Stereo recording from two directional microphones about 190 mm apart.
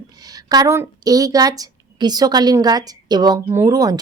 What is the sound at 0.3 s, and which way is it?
A woman's voice, 20° right (ahead or behind).